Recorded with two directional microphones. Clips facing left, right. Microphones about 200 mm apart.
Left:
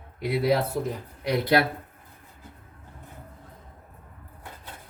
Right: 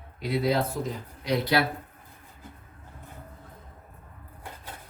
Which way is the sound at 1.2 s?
55° left (ahead or behind).